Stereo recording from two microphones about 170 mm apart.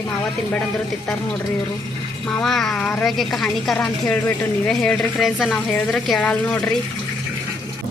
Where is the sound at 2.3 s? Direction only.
5° left (ahead or behind).